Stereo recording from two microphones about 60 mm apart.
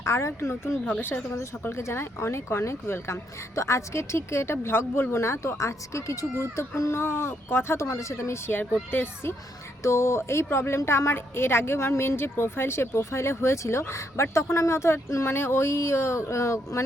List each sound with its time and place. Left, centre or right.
0.0 s a woman's voice: left
3.5 s a woman's voice: left
8.9 s a child's voice: left
9.8 s a woman's voice: left